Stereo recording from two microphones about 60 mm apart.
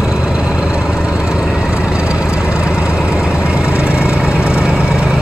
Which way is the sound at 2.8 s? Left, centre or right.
Left.